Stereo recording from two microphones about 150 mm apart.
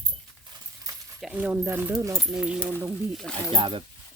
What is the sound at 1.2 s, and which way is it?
Speech, 5° right (ahead or behind).